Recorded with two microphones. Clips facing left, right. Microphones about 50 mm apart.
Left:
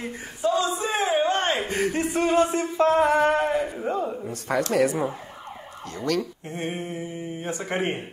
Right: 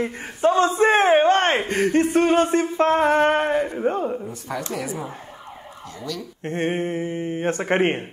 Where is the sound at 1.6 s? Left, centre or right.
Right.